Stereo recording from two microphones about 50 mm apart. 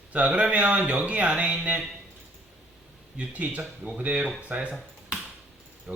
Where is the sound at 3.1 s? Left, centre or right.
Right.